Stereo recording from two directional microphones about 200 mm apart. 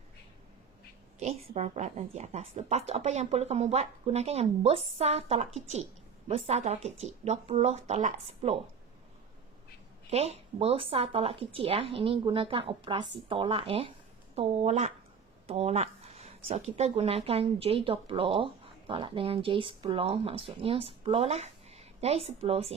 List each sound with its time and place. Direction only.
1.2 s a woman's voice: 35° right (ahead or behind)
10.0 s speech: 30° right (ahead or behind)